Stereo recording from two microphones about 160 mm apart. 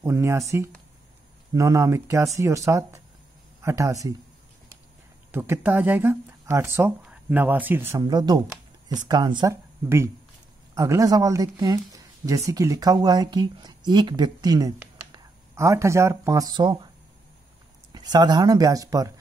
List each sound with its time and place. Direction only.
0.0 s speech: 15° right (ahead or behind)
1.5 s speech: 20° right (ahead or behind)
5.3 s speech: 15° right (ahead or behind)
8.0 s speech: 25° right (ahead or behind)
9.8 s speech: 15° right (ahead or behind)
17.9 s speech: 25° right (ahead or behind)